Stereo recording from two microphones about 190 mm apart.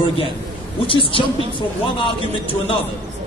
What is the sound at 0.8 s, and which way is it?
Music, 25° left (ahead or behind).